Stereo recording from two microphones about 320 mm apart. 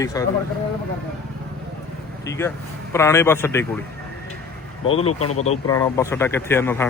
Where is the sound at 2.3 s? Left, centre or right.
Centre.